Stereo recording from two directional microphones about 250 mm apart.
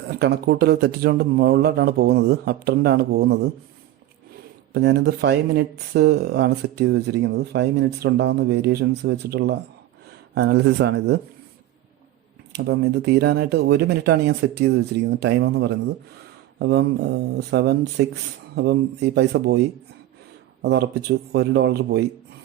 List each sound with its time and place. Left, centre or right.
0.1 s speech: right
4.7 s speech: right
12.5 s speech: right
20.6 s speech: right